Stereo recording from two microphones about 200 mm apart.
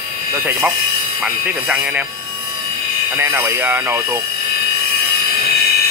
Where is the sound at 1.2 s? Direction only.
10° right (ahead or behind).